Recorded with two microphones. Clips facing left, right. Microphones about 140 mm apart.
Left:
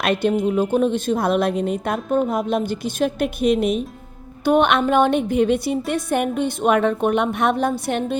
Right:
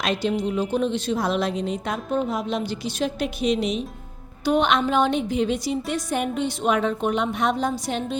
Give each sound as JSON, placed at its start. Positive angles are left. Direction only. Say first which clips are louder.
{"t": 0.0, "sound": "a woman's voice", "louder": "left 5 dB", "side_deg": 55}